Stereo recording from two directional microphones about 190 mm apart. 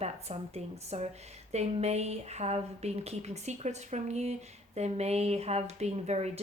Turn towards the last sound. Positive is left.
turn(degrees=-35)  # may be behind; listen again after turning